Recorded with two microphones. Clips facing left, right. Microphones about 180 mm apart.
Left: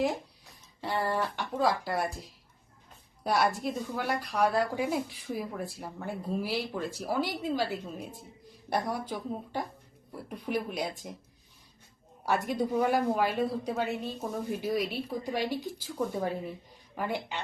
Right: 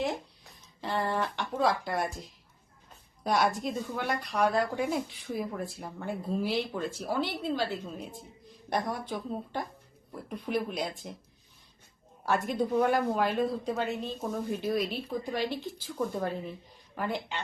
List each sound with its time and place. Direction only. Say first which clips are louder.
0.8 s a woman's voice: even; 10° left (ahead or behind)
3.2 s a woman's voice: even; centre (ahead or behind)
12.2 s a woman's voice: even; 10° left (ahead or behind)